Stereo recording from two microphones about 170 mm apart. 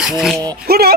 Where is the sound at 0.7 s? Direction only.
65° right (ahead or behind).